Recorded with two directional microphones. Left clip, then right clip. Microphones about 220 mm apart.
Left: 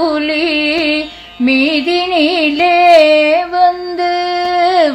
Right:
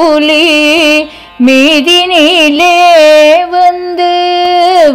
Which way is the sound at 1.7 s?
40° right (ahead or behind).